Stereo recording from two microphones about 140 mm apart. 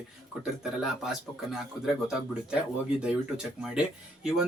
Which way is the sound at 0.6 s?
5° right (ahead or behind).